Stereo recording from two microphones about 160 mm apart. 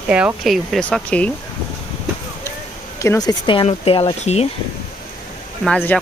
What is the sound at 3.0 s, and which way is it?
Speech, 20° left (ahead or behind).